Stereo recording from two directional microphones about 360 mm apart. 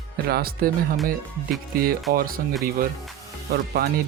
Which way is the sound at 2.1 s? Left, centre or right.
Right.